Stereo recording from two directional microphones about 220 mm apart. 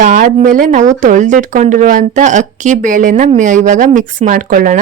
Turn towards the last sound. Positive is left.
turn(degrees=-40)  # may be behind; listen again after turning